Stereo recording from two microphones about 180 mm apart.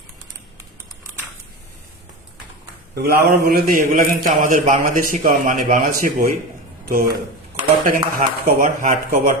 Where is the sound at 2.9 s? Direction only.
60° right (ahead or behind).